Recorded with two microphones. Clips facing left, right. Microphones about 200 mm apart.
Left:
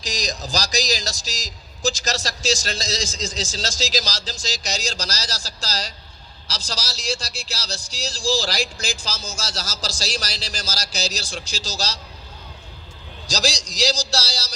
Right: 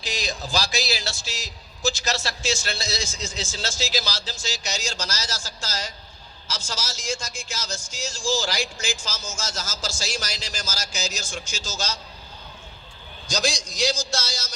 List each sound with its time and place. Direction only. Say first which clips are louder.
0.0 s a man's voice: left 2 dB; 40° left (ahead or behind)
13.2 s a man's voice: left 1 dB; 75° left (ahead or behind)
14.1 s a man's voice: left 3 dB; 35° left (ahead or behind)